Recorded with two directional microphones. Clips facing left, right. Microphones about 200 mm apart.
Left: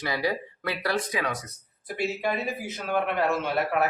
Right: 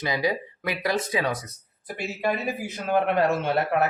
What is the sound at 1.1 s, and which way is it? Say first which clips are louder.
Speech: right 4 dB; 30° right (ahead or behind).